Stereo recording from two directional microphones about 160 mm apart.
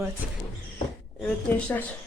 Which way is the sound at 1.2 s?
10° left (ahead or behind).